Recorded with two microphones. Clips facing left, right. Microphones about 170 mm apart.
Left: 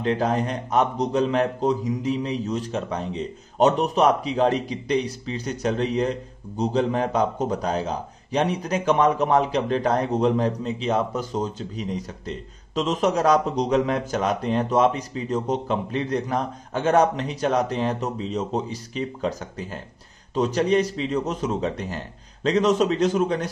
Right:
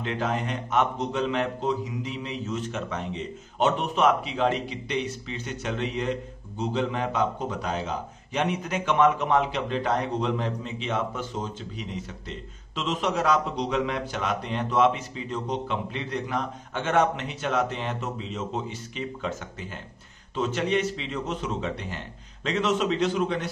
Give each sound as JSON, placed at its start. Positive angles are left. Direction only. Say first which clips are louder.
{"t": 0.0, "sound": "a man's voice", "louder": "left 6 dB", "side_deg": 35}